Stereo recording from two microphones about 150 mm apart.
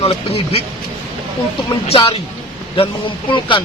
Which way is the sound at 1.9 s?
40° left (ahead or behind).